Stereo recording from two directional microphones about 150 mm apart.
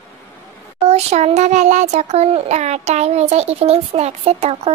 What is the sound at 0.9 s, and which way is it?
A child's voice, 45° right (ahead or behind).